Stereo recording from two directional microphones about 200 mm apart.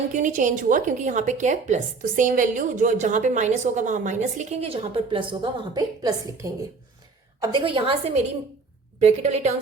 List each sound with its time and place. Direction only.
0.1 s a woman's voice: 40° right (ahead or behind)